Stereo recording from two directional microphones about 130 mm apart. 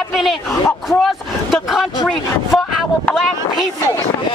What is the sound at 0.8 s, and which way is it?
Vehicle, centre (ahead or behind).